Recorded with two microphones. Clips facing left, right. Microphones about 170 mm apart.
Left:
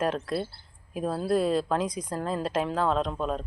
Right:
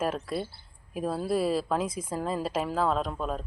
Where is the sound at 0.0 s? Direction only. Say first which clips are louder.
Left 2 dB; 5° right (ahead or behind).